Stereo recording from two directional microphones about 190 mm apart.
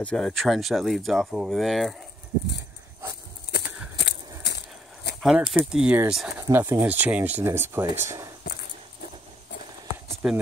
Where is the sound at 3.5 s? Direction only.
60° left (ahead or behind).